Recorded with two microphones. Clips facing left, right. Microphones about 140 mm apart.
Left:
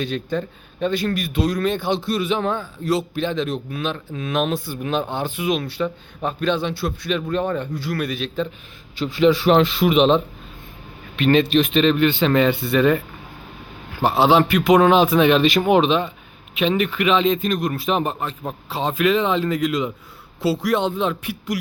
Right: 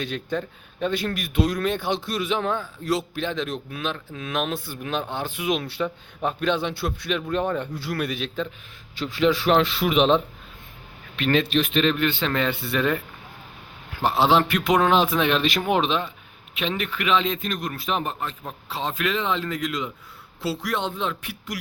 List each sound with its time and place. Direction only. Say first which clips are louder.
0.0 s a man's voice: left 4 dB; 5° right (ahead or behind)
7.9 s speech: left 1 dB; 15° right (ahead or behind)
9.0 s a man's voice: left 5 dB; 5° left (ahead or behind)
14.0 s a man's voice: left 4 dB; 5° left (ahead or behind)